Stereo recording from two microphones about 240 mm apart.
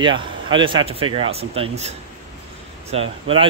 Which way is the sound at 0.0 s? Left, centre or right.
Centre.